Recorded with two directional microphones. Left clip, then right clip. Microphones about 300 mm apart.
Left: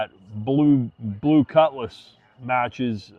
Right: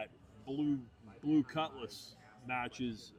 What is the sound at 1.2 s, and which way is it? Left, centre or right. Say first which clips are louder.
Speech: left 17 dB; centre.